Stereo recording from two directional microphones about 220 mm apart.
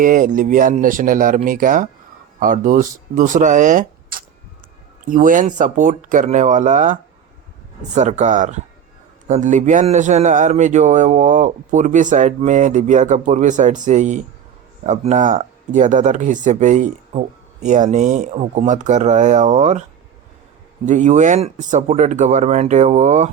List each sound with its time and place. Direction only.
0.0 s speech: 35° right (ahead or behind)
20.8 s speech: 35° right (ahead or behind)